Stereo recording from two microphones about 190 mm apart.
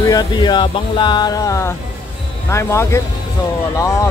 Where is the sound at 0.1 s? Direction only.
20° left (ahead or behind).